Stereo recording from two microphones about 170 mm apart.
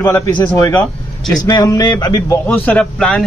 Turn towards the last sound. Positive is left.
turn(degrees=5)  # may be behind; listen again after turning